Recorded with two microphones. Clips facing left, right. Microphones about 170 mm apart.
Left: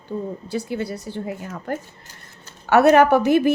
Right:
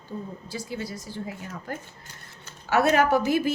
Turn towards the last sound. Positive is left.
turn(degrees=60)  # may be behind; listen again after turning